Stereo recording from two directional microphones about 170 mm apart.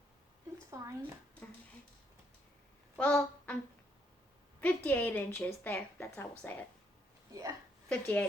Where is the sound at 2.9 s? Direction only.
10° left (ahead or behind).